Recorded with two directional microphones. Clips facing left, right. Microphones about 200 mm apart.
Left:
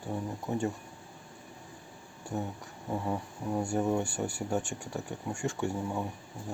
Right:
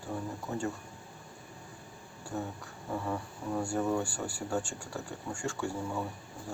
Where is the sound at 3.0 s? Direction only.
20° left (ahead or behind).